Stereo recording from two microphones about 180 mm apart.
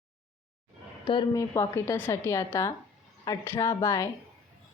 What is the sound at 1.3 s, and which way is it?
A woman's voice, 15° left (ahead or behind).